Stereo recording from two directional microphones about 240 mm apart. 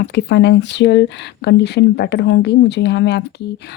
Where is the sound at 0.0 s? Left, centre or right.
Left.